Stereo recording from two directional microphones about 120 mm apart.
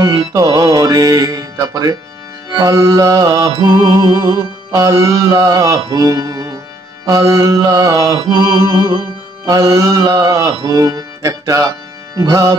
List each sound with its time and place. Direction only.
0.3 s music: 30° right (ahead or behind)
9.5 s speech: 30° right (ahead or behind)
12.2 s music: 30° right (ahead or behind)